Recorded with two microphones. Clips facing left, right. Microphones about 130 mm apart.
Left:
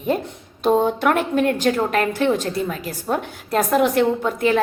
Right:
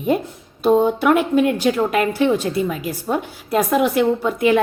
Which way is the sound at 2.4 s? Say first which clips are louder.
Right 3 dB; 40° left (ahead or behind).